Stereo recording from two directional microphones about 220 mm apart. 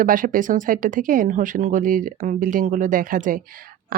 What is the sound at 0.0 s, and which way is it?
Speech, 40° right (ahead or behind).